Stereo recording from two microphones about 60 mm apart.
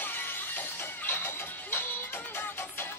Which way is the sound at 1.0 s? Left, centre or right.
Left.